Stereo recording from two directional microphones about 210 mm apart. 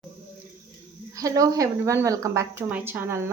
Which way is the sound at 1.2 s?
15° right (ahead or behind).